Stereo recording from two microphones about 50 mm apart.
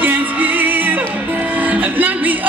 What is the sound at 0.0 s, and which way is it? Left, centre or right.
Music, right.